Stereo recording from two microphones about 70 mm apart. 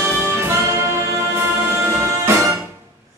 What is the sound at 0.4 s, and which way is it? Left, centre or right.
Music, right.